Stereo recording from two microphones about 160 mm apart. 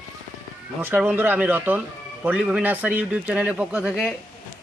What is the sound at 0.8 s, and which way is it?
Speech, 10° right (ahead or behind).